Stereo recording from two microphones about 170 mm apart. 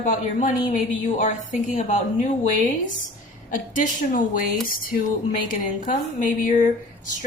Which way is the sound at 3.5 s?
50° left (ahead or behind).